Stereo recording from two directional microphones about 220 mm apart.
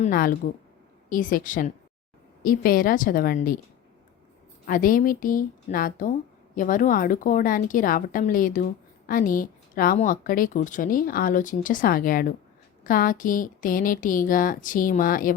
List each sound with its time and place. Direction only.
0.0 s a woman's voice: 40° left (ahead or behind)
4.6 s a woman's voice: 40° left (ahead or behind)